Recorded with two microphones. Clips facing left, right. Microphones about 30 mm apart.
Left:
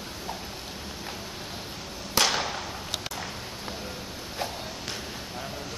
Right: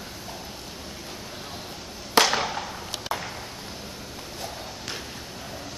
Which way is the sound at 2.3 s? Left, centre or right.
Centre.